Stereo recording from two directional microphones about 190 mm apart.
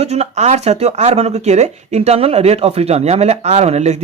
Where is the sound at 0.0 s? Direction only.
35° right (ahead or behind).